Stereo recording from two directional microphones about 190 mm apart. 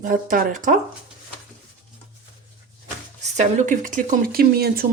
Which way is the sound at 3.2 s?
40° right (ahead or behind).